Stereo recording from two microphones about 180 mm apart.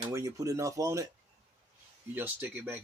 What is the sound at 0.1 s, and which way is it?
Speech, 15° right (ahead or behind).